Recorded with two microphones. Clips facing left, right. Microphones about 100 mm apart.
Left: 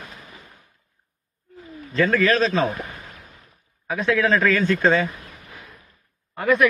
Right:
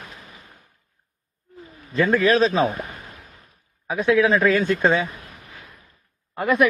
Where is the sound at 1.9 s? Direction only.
15° right (ahead or behind).